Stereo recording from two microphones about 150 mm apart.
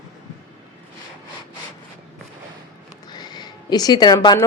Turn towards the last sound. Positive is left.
turn(degrees=30)  # may be behind; listen again after turning